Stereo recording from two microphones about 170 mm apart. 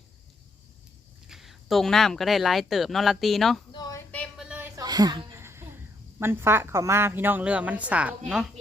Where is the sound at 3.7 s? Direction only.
25° left (ahead or behind).